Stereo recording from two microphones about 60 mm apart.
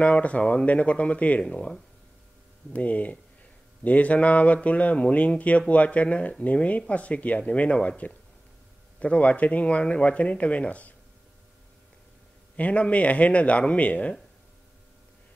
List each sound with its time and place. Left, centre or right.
0.0 s speech: left
2.7 s speech: left
9.0 s speech: left
12.5 s speech: left